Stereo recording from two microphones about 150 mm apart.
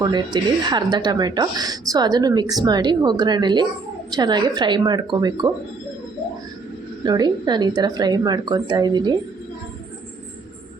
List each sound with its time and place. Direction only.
0.6 s speech: 30° right (ahead or behind)
7.0 s speech: 30° right (ahead or behind)